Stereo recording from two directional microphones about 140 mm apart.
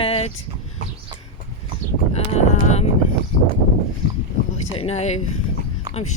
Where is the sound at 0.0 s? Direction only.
45° left (ahead or behind).